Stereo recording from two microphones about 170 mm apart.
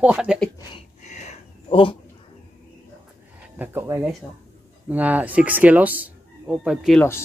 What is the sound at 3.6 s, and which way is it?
Speech, 15° right (ahead or behind).